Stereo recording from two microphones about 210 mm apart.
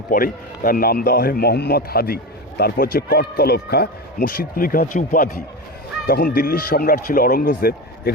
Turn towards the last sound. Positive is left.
turn(degrees=45)  # may be behind; listen again after turning